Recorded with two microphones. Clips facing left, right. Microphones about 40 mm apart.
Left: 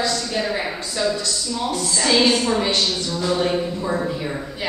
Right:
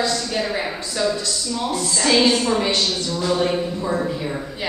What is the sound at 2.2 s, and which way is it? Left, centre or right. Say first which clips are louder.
A man's voice: even; centre.